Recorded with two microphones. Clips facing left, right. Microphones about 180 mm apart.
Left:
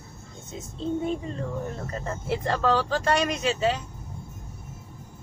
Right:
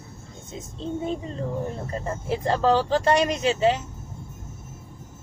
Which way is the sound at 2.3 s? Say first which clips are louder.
Right 3 dB; 20° right (ahead or behind).